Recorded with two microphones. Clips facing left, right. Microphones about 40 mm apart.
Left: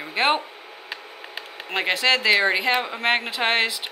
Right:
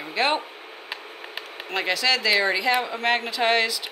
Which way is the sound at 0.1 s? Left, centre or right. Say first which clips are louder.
Left 2 dB; left.